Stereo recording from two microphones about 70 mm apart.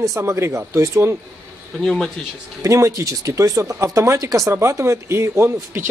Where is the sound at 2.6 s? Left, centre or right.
Right.